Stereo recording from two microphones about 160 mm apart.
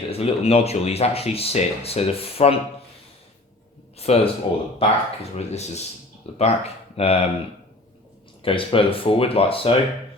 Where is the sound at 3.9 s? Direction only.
40° left (ahead or behind).